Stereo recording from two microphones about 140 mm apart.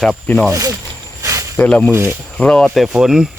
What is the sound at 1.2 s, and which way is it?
Cricket, 20° right (ahead or behind).